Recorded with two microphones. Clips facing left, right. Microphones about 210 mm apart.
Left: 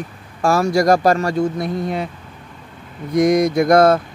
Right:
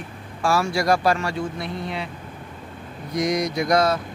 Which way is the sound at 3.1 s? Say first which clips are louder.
Left 8 dB; 50° left (ahead or behind).